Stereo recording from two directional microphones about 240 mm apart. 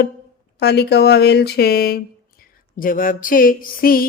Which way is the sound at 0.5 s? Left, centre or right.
Left.